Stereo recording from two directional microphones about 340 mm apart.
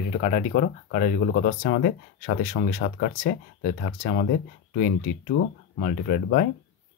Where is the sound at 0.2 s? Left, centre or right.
Left.